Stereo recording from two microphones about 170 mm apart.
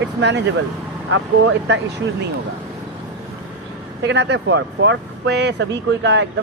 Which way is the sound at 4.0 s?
90° right.